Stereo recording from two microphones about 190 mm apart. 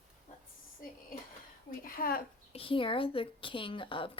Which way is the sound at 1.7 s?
50° left (ahead or behind).